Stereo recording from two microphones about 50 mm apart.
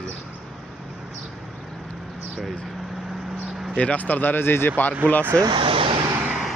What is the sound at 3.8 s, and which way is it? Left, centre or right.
Speech, left.